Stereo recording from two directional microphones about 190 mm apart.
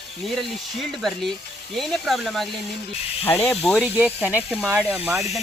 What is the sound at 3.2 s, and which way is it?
Speech, 10° left (ahead or behind).